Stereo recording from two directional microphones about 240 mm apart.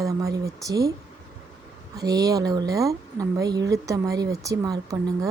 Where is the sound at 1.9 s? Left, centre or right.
Centre.